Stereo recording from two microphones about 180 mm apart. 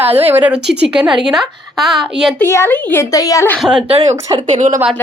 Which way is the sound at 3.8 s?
35° right (ahead or behind).